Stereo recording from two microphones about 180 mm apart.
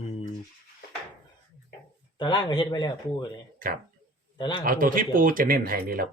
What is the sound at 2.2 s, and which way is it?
Speech, 25° left (ahead or behind).